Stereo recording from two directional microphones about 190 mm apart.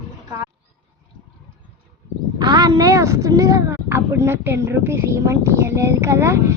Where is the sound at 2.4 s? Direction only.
20° right (ahead or behind).